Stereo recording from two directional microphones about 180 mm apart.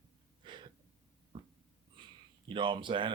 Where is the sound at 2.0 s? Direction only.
25° right (ahead or behind).